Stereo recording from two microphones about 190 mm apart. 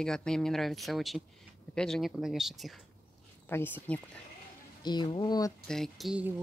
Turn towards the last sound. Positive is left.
turn(degrees=-5)  # may be behind; listen again after turning